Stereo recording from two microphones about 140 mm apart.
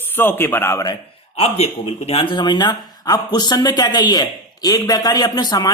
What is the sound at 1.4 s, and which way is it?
Speech, 45° left (ahead or behind).